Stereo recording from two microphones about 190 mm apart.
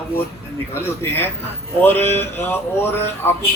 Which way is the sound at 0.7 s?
10° left (ahead or behind).